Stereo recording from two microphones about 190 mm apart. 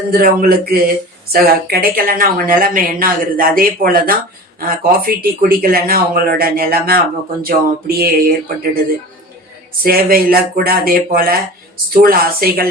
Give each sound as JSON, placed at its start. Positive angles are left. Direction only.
{"t": 0.1, "sound": "speech", "side_deg": -50}
{"t": 9.8, "sound": "speech", "side_deg": -50}